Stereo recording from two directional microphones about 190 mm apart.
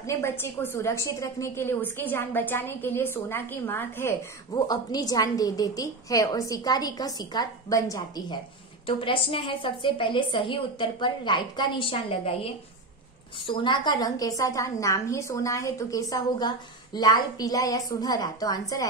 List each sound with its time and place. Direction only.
0.0 s a woman's voice: 15° left (ahead or behind); by 12.4 s 30° left (ahead or behind)
13.5 s a woman's voice: 25° left (ahead or behind)